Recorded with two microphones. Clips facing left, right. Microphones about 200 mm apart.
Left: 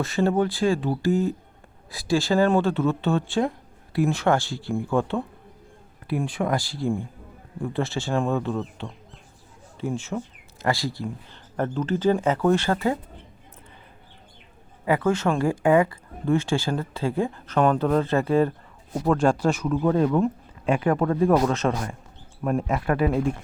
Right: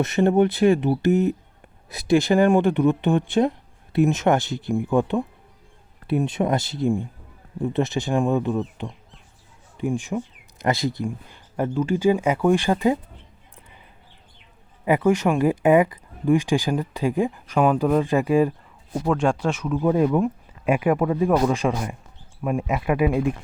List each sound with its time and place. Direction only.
0.0 s speech: 20° right (ahead or behind)
14.8 s speech: 20° right (ahead or behind)
18.9 s speech: centre (ahead or behind)
19.8 s speech: 10° right (ahead or behind)